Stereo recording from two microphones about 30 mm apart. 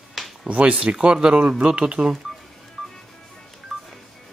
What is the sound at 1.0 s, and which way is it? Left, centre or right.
Speech, right.